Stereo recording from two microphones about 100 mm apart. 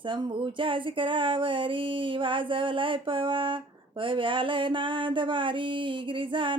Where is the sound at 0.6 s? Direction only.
60° right (ahead or behind).